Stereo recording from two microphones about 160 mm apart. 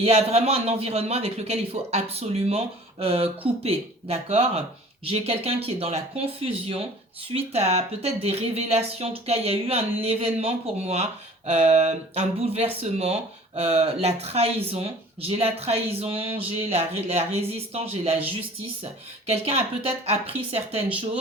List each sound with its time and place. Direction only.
0.0 s speech: 40° right (ahead or behind)
19.3 s speech: 40° right (ahead or behind)